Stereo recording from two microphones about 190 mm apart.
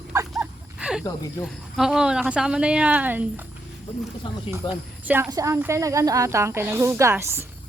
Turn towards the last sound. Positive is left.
turn(degrees=-15)  # may be behind; listen again after turning